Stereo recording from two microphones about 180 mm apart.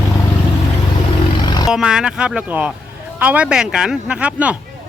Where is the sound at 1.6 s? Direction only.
5° right (ahead or behind).